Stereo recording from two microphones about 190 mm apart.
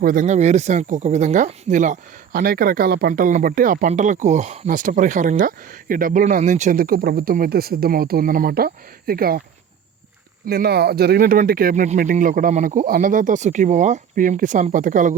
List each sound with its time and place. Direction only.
0.0 s speech: 45° right (ahead or behind)
10.4 s speech: 55° right (ahead or behind)